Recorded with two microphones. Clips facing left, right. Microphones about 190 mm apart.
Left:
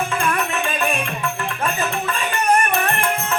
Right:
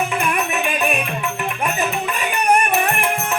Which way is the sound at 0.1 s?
15° right (ahead or behind).